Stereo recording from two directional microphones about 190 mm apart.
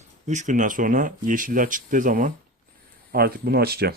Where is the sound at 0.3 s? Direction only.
40° right (ahead or behind).